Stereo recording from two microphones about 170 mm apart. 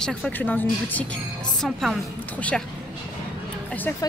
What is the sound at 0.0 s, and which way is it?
A woman's voice, 5° left (ahead or behind).